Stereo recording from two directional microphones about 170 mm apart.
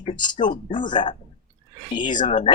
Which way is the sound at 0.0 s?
25° left (ahead or behind).